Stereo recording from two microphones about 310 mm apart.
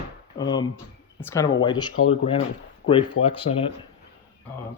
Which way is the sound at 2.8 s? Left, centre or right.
Left.